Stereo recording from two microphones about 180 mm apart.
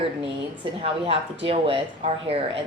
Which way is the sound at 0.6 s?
35° right (ahead or behind).